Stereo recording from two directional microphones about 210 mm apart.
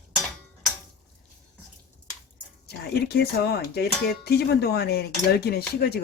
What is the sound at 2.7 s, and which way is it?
Speech, 50° left (ahead or behind).